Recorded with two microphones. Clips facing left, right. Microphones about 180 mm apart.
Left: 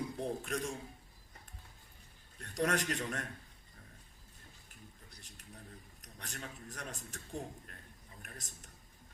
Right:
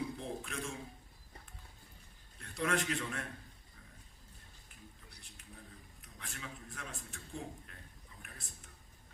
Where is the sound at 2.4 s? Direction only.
40° left (ahead or behind).